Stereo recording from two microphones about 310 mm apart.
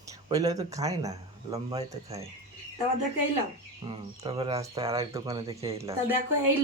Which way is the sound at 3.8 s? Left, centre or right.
Centre.